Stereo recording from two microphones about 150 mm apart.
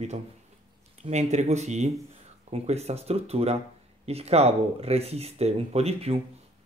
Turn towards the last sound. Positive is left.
turn(degrees=-45)  # may be behind; listen again after turning